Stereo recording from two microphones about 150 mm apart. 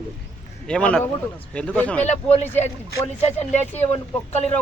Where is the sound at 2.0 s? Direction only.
50° left (ahead or behind).